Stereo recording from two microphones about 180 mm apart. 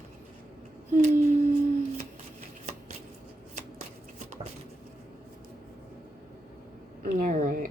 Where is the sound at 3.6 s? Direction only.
45° right (ahead or behind).